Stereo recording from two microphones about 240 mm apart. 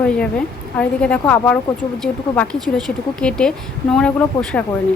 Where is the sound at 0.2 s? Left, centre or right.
Centre.